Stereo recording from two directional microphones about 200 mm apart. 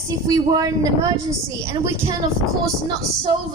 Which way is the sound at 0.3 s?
20° right (ahead or behind).